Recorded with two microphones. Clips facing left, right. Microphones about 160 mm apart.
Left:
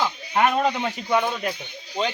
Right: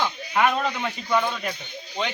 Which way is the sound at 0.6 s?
25° left (ahead or behind).